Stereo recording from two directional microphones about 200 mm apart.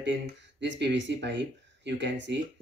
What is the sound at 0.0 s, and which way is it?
Speech, 60° right (ahead or behind).